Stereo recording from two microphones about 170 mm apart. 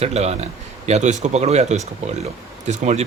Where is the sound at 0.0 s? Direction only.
40° right (ahead or behind).